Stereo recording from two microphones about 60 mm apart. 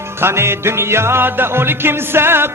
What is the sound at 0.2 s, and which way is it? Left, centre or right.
Music, right.